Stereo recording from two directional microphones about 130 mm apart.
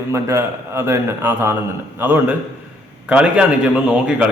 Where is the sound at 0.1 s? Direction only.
20° right (ahead or behind).